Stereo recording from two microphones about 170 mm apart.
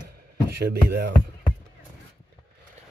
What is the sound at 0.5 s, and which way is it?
Speech, 70° right (ahead or behind).